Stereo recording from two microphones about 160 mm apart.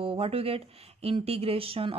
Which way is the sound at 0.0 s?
35° right (ahead or behind).